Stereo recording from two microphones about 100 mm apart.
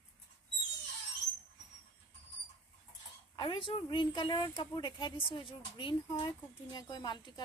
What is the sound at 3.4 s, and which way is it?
Speech, 60° left (ahead or behind).